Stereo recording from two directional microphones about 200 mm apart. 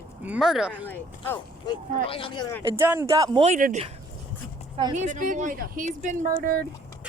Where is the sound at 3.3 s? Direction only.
35° right (ahead or behind).